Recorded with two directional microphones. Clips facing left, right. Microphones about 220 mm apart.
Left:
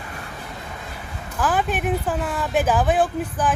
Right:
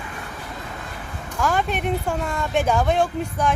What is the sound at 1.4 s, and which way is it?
Speech, 5° left (ahead or behind).